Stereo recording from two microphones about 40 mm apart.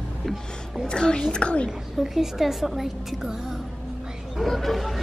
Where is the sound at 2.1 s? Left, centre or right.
Centre.